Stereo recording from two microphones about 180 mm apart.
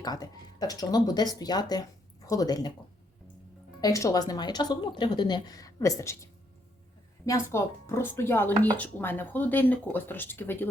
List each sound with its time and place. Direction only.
0.0 s a woman's voice: 20° left (ahead or behind)
3.8 s a woman's voice: 20° left (ahead or behind)
7.3 s speech: 15° left (ahead or behind)